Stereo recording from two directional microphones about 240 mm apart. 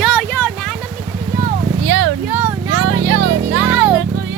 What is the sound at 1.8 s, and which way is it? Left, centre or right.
Speech, right.